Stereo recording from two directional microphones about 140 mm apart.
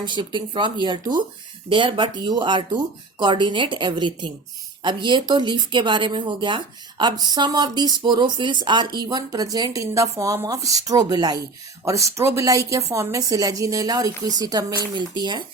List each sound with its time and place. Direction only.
0.0 s speech: 35° right (ahead or behind)